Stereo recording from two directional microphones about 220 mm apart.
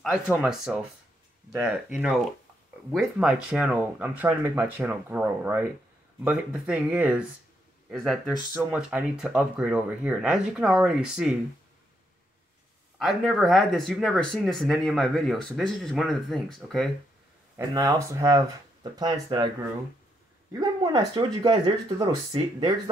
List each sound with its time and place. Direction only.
0.0 s speech: centre (ahead or behind)
13.0 s speech: centre (ahead or behind)
17.6 s speech: 15° right (ahead or behind)
20.5 s speech: 20° right (ahead or behind)